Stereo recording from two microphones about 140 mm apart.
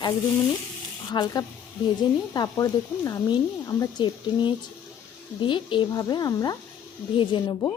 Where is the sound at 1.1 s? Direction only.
25° left (ahead or behind).